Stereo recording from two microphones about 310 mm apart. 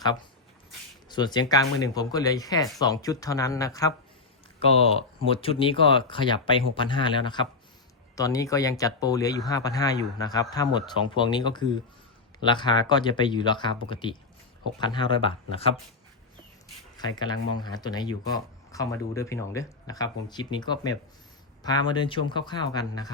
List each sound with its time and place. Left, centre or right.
1.0 s speech: centre
17.0 s speech: centre